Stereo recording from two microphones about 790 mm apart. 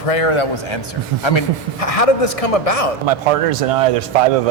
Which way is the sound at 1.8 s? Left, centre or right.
Left.